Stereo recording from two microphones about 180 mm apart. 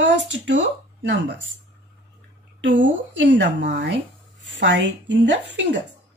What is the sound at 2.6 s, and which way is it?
Speech, 90° right.